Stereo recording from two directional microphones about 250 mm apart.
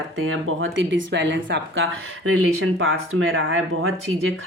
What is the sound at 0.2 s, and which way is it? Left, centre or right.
Speech, right.